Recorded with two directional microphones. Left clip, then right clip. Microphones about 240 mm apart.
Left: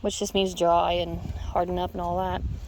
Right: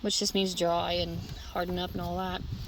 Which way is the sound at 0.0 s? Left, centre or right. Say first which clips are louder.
Left 3 dB; centre.